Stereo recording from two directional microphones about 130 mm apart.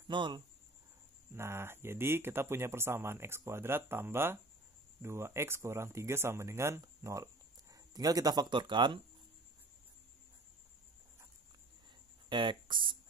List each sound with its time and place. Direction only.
0.1 s speech: 40° right (ahead or behind)
1.3 s speech: 20° right (ahead or behind); by 9.0 s 40° right (ahead or behind)
12.3 s speech: 40° right (ahead or behind)